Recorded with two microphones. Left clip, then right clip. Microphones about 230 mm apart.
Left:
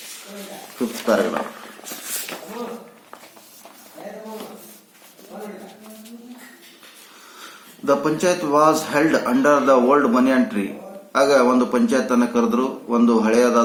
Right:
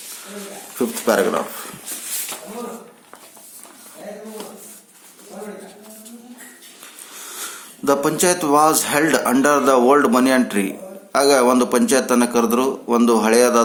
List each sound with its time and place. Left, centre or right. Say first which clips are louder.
0.8 s a man's voice: right 2 dB; right
7.9 s a man's voice: right 1 dB; right